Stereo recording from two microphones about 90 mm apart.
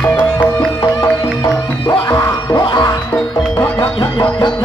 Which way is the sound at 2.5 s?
50° left (ahead or behind).